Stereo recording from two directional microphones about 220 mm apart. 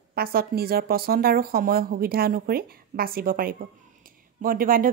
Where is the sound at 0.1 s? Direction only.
45° right (ahead or behind).